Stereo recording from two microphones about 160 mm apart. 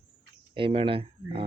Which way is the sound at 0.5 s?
35° right (ahead or behind).